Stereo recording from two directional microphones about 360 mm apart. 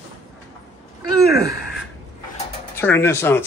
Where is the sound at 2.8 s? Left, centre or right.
Centre.